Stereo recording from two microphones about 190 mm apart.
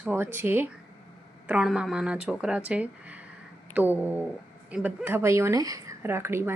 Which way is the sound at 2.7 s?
5° right (ahead or behind).